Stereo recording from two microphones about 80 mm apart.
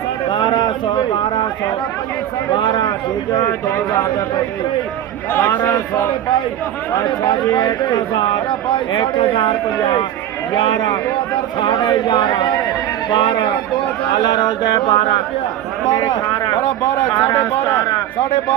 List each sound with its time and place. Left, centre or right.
0.3 s a sound: left
2.6 s speech: left
5.4 s a man's voice: left
7.0 s speech: left
10.5 s speech: left
15.9 s speech: left